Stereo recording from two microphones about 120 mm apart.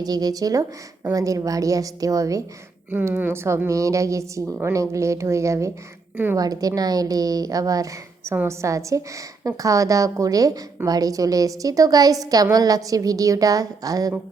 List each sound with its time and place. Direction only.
0.0 s a woman's voice: 35° right (ahead or behind)